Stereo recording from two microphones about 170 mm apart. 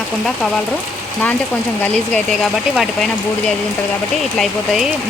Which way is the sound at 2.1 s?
Centre (ahead or behind).